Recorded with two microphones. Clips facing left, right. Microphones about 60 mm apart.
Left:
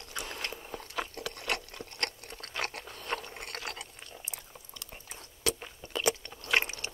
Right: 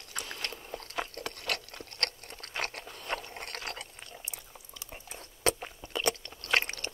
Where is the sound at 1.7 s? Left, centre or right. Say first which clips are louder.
Even; centre.